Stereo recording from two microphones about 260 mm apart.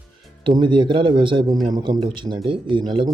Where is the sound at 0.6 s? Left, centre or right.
Centre.